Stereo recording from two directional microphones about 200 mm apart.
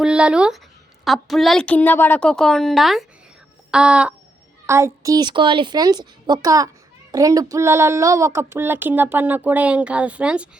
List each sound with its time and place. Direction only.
0.0 s a woman's voice: 5° right (ahead or behind)
3.7 s a sound: 5° right (ahead or behind)
4.6 s a woman's voice: 15° right (ahead or behind)